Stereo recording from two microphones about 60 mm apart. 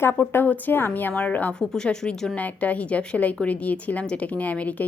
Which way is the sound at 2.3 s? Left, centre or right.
Left.